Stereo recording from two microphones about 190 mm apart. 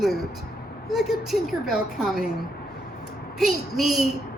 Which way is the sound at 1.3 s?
Centre (ahead or behind).